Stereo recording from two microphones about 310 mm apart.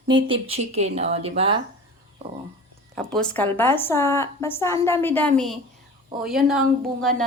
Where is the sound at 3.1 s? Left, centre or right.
Centre.